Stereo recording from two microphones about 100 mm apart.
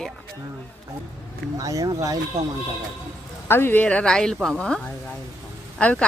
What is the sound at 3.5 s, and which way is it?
A woman's voice, 20° left (ahead or behind).